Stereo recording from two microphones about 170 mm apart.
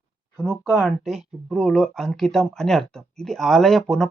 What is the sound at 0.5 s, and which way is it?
Speech, centre (ahead or behind).